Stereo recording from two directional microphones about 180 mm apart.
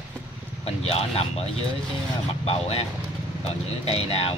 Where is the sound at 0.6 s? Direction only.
35° left (ahead or behind).